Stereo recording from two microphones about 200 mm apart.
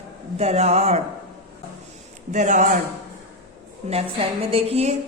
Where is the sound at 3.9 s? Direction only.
30° right (ahead or behind).